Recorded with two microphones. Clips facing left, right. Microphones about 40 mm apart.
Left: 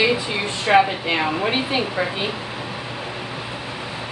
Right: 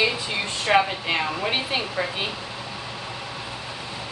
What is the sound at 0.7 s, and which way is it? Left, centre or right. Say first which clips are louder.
Speech: left 4 dB; centre.